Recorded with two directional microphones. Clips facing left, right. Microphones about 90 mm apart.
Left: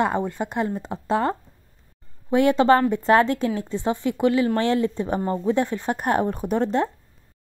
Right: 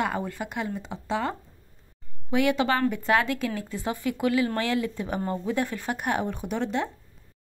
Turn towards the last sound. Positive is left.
turn(degrees=40)  # may be behind; listen again after turning